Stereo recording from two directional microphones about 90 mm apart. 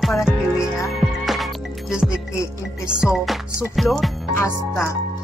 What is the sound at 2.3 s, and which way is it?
Speech, 35° left (ahead or behind).